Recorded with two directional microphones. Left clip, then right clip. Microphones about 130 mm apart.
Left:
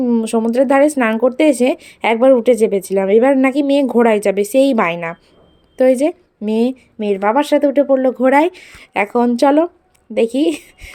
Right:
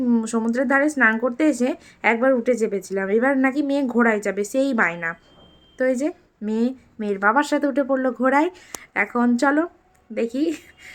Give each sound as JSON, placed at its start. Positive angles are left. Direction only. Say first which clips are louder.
{"t": 0.0, "sound": "a woman's voice", "louder": "left 6 dB", "side_deg": 20}
{"t": 10.2, "sound": "a woman's voice", "louder": "left 8 dB", "side_deg": 40}